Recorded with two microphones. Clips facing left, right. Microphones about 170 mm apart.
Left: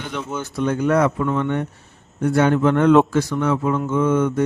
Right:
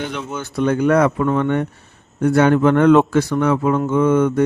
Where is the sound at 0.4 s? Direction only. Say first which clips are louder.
Right 4 dB; 65° right (ahead or behind).